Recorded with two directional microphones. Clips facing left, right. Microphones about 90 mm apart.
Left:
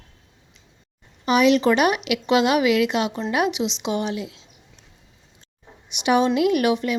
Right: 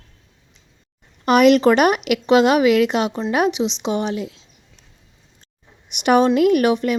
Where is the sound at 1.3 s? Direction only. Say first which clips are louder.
Right 4 dB; 55° right (ahead or behind); by 4.4 s 40° right (ahead or behind).